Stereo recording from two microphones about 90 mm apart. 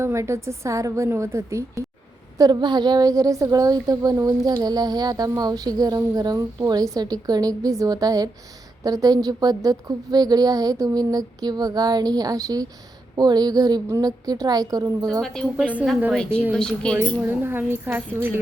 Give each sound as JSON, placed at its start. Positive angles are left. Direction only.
{"t": 0.0, "sound": "a woman's voice", "side_deg": -30}
{"t": 2.4, "sound": "a woman's voice", "side_deg": -55}
{"t": 15.2, "sound": "a woman's voice", "side_deg": 5}
{"t": 17.2, "sound": "a woman's voice", "side_deg": -25}